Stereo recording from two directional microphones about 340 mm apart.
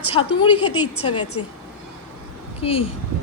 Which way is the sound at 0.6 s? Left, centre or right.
Left.